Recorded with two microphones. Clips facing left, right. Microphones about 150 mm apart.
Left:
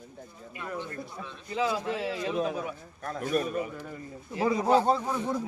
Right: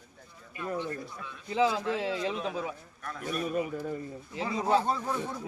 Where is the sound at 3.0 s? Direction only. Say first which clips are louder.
Left 6 dB; 40° left (ahead or behind).